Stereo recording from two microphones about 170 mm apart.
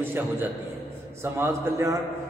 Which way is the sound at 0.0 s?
10° right (ahead or behind).